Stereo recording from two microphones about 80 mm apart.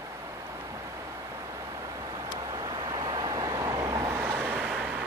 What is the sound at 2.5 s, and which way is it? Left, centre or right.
Vehicle, right.